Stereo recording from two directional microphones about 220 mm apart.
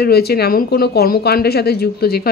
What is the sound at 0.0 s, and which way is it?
Speech, 45° left (ahead or behind).